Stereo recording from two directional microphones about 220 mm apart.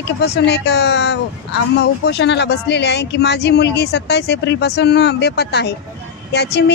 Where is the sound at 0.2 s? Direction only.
50° left (ahead or behind).